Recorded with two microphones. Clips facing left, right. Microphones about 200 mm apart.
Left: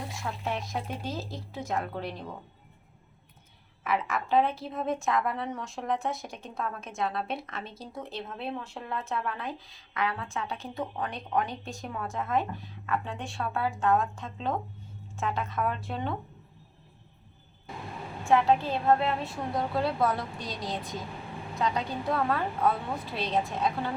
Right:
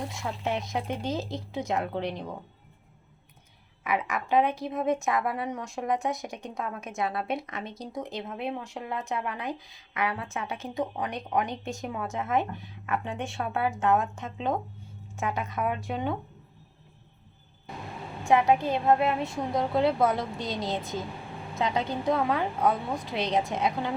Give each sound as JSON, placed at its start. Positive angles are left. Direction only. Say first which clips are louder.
{"t": 0.2, "sound": "speech", "louder": "right 2 dB", "side_deg": -20}
{"t": 3.8, "sound": "speech", "louder": "right 1 dB", "side_deg": -15}
{"t": 5.1, "sound": "a woman's voice", "louder": "right 1 dB", "side_deg": -5}
{"t": 5.5, "sound": "speech", "louder": "right 2 dB", "side_deg": -15}
{"t": 7.0, "sound": "a woman's voice", "louder": "right 1 dB", "side_deg": -5}
{"t": 7.3, "sound": "speech", "louder": "right 4 dB", "side_deg": -15}
{"t": 18.3, "sound": "speech", "louder": "right 1 dB", "side_deg": -15}